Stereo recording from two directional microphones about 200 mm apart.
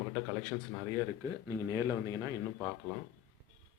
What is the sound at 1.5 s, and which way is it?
Speech, 15° right (ahead or behind).